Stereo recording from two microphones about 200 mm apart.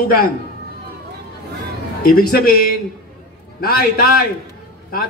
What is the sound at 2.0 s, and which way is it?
Speech, 50° left (ahead or behind).